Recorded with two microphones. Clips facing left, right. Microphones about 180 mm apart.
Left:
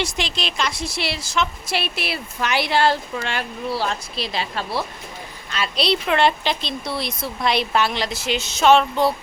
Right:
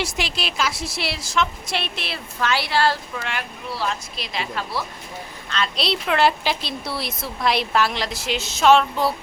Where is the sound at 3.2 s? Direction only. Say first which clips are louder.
Left 3 dB; 30° left (ahead or behind).